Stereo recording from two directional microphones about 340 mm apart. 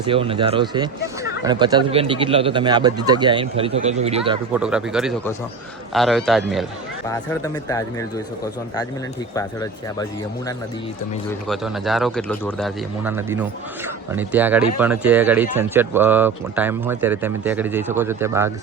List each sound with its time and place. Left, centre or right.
0.0 s speech: centre
4.5 s speech: centre
7.1 s speech: centre
9.3 s speech: centre
11.3 s speech: centre